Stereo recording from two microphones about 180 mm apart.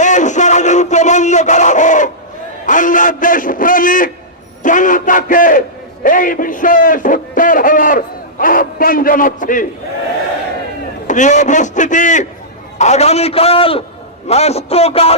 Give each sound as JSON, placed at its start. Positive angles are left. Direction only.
{"t": 0.0, "sound": "a sound", "side_deg": 45}
{"t": 2.6, "sound": "a man's voice", "side_deg": 45}
{"t": 11.0, "sound": "a man's voice", "side_deg": 45}